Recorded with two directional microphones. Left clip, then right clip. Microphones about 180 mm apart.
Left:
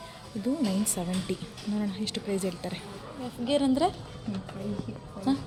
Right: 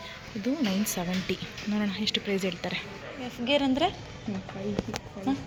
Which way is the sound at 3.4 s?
15° left (ahead or behind).